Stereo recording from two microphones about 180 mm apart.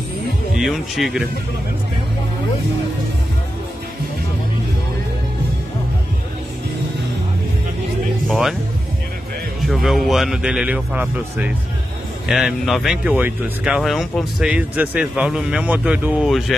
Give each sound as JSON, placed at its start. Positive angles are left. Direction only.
{"t": 0.6, "sound": "speech", "side_deg": 0}
{"t": 8.3, "sound": "speech", "side_deg": 0}
{"t": 9.6, "sound": "speech", "side_deg": 0}